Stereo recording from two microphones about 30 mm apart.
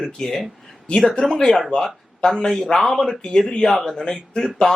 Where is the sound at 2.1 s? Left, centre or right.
Left.